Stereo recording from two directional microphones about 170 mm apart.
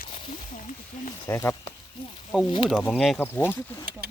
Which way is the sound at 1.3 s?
15° left (ahead or behind).